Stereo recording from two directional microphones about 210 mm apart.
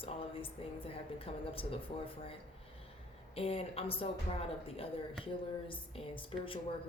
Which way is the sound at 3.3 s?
25° left (ahead or behind).